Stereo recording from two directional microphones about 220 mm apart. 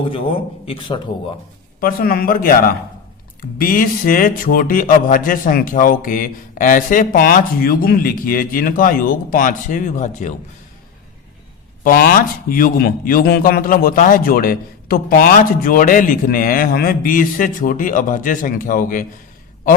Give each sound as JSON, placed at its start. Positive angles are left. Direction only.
{"t": 0.6, "sound": "speech", "side_deg": 25}
{"t": 1.8, "sound": "speech", "side_deg": 40}
{"t": 11.8, "sound": "speech", "side_deg": 40}